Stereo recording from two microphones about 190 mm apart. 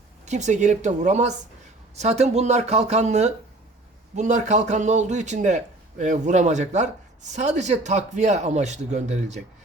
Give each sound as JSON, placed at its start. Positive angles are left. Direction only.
{"t": 0.3, "sound": "speech", "side_deg": -40}